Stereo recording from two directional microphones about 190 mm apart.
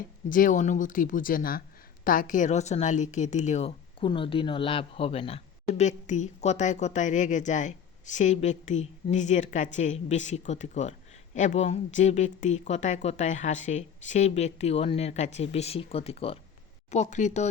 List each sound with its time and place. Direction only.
0.3 s a woman's voice: 45° left (ahead or behind)